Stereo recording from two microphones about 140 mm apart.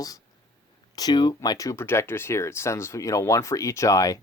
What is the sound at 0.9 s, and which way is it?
Speech, 30° left (ahead or behind).